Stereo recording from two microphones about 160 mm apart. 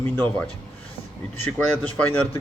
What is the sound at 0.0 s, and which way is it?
Speech, 15° left (ahead or behind).